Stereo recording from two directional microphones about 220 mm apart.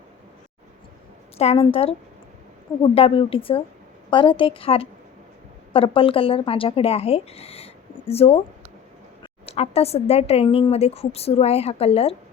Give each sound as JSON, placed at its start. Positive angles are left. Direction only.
{"t": 1.4, "sound": "a woman's voice", "side_deg": 25}
{"t": 9.5, "sound": "a woman's voice", "side_deg": 25}